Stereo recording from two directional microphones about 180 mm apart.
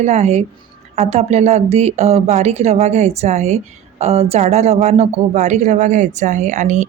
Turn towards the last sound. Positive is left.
turn(degrees=-40)  # may be behind; listen again after turning